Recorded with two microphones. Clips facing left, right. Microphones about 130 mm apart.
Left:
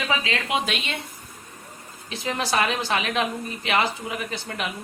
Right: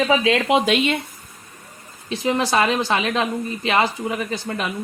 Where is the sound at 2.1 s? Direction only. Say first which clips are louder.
Right 6 dB; 25° right (ahead or behind).